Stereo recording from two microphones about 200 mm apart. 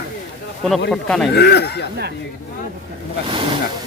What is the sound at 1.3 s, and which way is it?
Speech, 55° left (ahead or behind).